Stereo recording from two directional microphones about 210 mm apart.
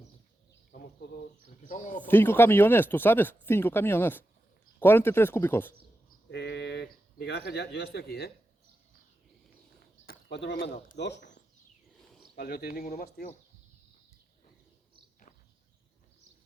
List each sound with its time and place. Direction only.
1.6 s speech: 40° left (ahead or behind)
2.0 s speech: 10° left (ahead or behind)
6.3 s a man's voice: 55° left (ahead or behind)
10.1 s speech: 55° left (ahead or behind)
12.4 s speech: 50° left (ahead or behind)